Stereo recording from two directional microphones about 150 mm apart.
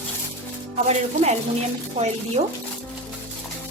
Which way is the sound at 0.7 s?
50° right (ahead or behind).